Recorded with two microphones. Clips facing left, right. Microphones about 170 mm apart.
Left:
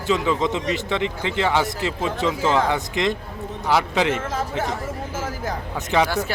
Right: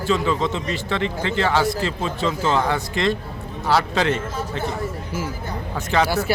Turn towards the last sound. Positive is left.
turn(degrees=15)  # may be behind; listen again after turning